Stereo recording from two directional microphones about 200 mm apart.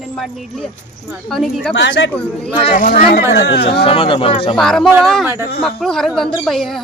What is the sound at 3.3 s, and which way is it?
Speech, 55° left (ahead or behind).